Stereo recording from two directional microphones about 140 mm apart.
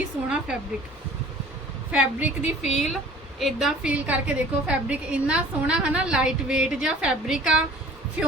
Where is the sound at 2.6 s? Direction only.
55° left (ahead or behind).